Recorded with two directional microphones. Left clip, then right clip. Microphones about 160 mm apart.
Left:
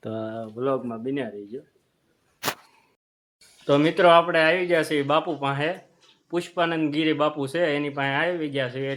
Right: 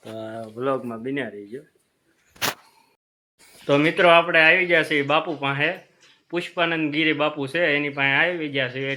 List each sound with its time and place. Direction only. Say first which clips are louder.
0.3 s a sound: even; 15° left (ahead or behind)
0.5 s speech: right 1 dB; 5° right (ahead or behind)
2.4 s single-lens reflex camera: right 3 dB; centre (ahead or behind)
3.7 s speech: right 1 dB; centre (ahead or behind)